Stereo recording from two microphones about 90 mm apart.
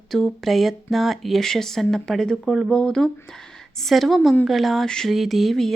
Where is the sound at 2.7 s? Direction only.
10° left (ahead or behind).